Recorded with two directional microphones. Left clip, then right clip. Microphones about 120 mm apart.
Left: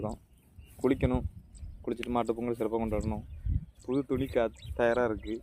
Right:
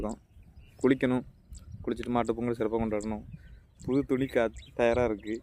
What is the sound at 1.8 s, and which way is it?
Speech, 40° right (ahead or behind).